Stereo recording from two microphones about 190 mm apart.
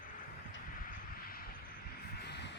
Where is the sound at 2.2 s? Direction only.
65° left (ahead or behind).